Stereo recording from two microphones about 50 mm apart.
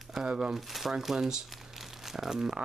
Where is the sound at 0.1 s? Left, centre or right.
Centre.